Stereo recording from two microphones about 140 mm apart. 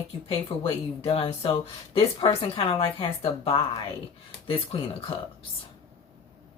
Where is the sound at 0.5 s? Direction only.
45° left (ahead or behind).